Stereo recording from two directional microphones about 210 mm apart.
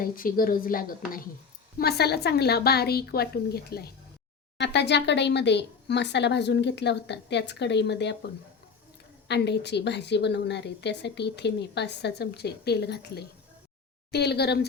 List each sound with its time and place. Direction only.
0.0 s a woman's voice: 45° left (ahead or behind)
9.2 s a woman's voice: 55° left (ahead or behind)